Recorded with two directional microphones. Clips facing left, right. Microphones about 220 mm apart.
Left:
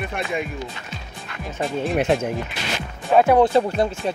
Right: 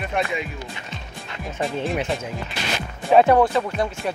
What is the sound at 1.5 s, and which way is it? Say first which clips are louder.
Speech: left 2 dB; centre (ahead or behind).